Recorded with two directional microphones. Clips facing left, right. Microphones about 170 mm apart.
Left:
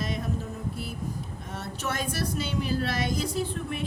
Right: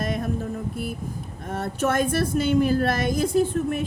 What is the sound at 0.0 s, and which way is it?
Music, 50° right (ahead or behind).